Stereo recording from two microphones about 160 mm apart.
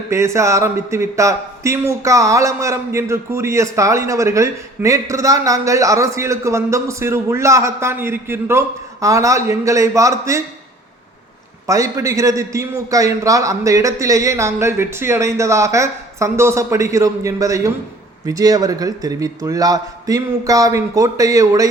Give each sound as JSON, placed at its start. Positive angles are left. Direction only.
{"t": 0.1, "sound": "speech", "side_deg": -15}
{"t": 11.6, "sound": "speech", "side_deg": -20}